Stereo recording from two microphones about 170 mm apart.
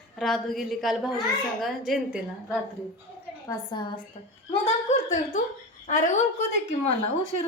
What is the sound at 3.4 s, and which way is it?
Speech, 25° left (ahead or behind).